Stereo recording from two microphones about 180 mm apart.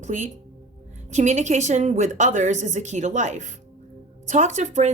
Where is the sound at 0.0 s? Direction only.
45° right (ahead or behind).